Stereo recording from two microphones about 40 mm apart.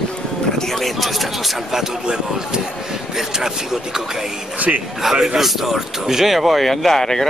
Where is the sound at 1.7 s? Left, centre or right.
Centre.